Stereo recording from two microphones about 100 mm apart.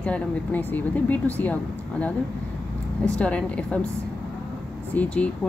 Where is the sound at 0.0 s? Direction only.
15° left (ahead or behind).